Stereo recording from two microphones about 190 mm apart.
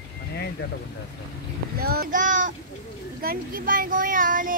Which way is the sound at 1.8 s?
50° right (ahead or behind).